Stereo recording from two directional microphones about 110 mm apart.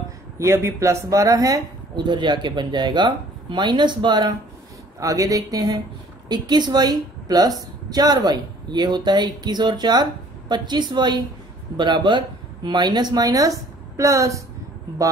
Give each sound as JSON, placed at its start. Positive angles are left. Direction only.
{"t": 0.4, "sound": "speech", "side_deg": -25}
{"t": 2.0, "sound": "speech", "side_deg": -45}
{"t": 5.0, "sound": "speech", "side_deg": -30}